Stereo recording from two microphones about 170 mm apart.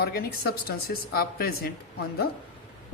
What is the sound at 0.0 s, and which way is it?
A man's voice, 65° left (ahead or behind).